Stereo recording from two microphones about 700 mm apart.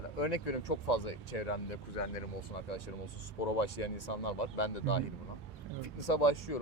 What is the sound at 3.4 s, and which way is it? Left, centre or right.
Speech, left.